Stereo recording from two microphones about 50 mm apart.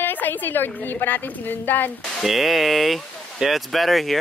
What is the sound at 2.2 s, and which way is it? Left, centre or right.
Speech, centre.